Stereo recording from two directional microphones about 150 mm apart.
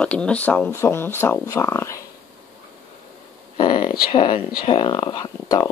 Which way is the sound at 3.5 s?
30° left (ahead or behind).